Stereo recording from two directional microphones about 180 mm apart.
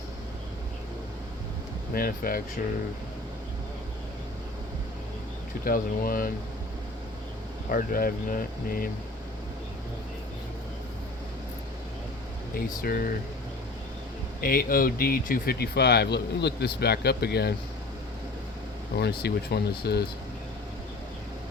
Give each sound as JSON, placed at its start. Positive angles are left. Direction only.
{"t": 1.9, "sound": "speech", "side_deg": 55}
{"t": 5.6, "sound": "speech", "side_deg": 55}
{"t": 7.7, "sound": "speech", "side_deg": 50}
{"t": 12.5, "sound": "speech", "side_deg": 55}
{"t": 14.4, "sound": "speech", "side_deg": 55}
{"t": 18.9, "sound": "speech", "side_deg": 65}